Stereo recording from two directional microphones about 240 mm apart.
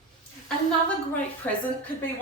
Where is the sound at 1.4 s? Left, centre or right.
Centre.